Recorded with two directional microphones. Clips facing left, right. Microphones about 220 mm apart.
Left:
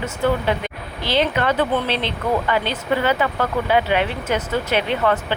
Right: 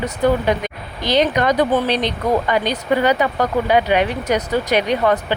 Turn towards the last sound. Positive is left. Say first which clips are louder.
# right 3 dB
turn(degrees=-15)  # may be behind; listen again after turning